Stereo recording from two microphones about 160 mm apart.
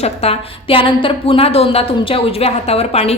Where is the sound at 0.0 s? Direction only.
40° left (ahead or behind).